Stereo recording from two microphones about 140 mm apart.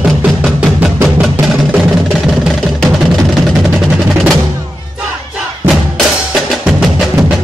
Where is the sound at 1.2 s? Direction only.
5° right (ahead or behind).